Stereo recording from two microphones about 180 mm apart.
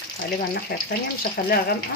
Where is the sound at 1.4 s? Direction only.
50° left (ahead or behind).